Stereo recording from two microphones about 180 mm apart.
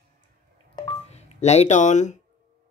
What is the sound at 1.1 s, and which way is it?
Speech, 35° left (ahead or behind).